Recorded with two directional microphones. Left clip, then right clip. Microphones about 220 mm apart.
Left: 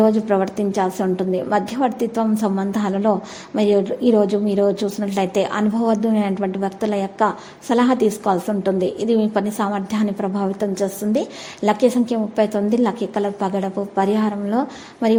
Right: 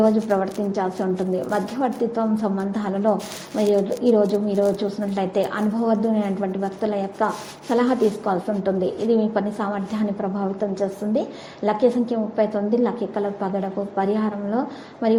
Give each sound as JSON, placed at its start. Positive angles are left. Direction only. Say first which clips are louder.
{"t": 0.0, "sound": "a woman's voice", "louder": "left 2 dB", "side_deg": 45}